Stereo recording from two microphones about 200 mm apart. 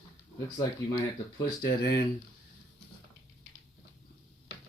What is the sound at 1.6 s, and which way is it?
Speech, 60° left (ahead or behind).